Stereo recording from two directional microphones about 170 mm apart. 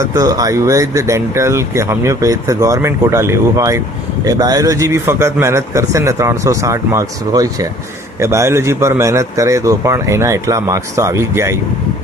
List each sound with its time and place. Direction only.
0.0 s speech: 20° right (ahead or behind)